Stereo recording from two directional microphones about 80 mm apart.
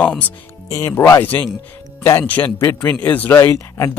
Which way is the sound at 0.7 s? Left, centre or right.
Left.